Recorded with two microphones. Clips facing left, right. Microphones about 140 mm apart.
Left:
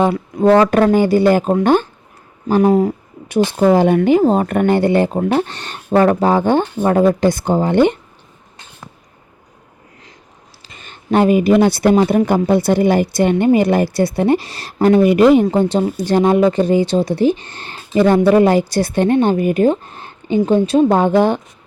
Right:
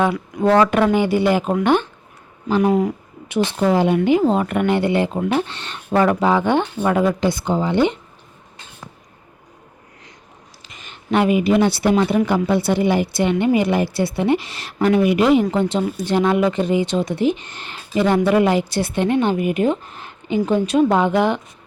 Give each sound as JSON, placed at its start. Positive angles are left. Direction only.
{"t": 0.0, "sound": "speech", "side_deg": 30}
{"t": 10.6, "sound": "speech", "side_deg": 35}
{"t": 15.4, "sound": "speech", "side_deg": 35}